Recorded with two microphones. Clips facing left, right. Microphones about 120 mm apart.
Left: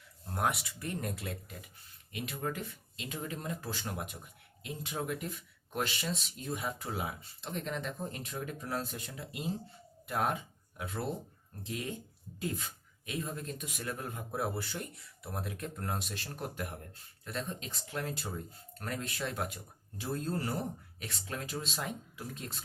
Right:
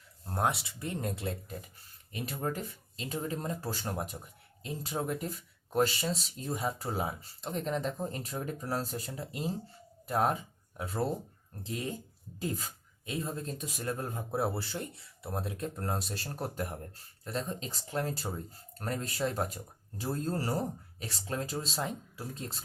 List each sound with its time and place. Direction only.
0.3 s speech: 30° right (ahead or behind)